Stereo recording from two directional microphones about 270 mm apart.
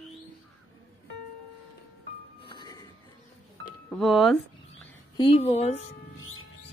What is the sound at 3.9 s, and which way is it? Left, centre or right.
Speech, centre.